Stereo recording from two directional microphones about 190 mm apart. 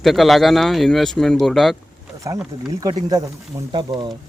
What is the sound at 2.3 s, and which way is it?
Speech, 20° right (ahead or behind).